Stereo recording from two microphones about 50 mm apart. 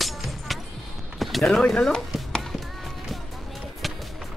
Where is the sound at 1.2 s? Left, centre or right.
Centre.